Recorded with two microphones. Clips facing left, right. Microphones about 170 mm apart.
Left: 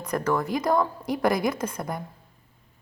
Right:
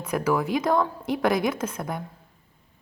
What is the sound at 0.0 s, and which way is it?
A woman's voice, 5° right (ahead or behind).